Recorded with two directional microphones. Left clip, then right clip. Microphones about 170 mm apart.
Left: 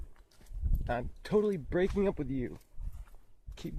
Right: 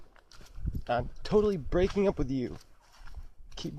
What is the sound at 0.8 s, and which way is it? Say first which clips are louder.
Speech: right 5 dB; 35° left (ahead or behind).